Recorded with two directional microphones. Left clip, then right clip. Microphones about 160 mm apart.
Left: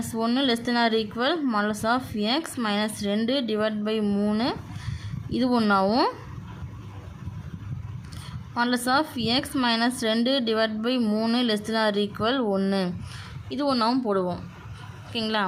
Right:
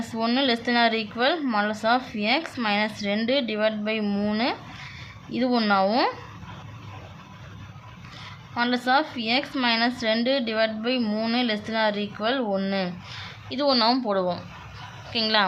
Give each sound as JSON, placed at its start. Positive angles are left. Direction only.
{"t": 0.1, "sound": "a woman's voice", "side_deg": 15}
{"t": 8.5, "sound": "a woman's voice", "side_deg": 20}